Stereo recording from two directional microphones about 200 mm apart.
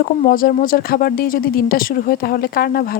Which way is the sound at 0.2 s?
45° left (ahead or behind).